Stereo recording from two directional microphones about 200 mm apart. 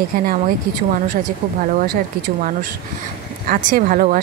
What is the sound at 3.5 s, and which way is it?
Speech, 40° right (ahead or behind).